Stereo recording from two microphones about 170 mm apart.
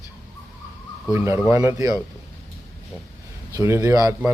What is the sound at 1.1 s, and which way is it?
Speech, 15° right (ahead or behind).